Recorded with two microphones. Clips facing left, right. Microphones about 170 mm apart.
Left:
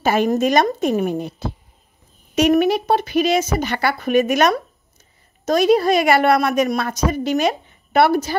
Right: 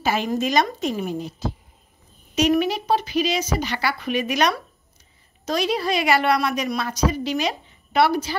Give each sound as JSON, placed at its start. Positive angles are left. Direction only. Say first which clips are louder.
{"t": 0.0, "sound": "a woman's voice", "louder": "left 6 dB", "side_deg": 50}